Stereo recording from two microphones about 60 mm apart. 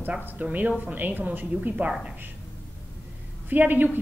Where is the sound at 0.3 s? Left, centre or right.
Right.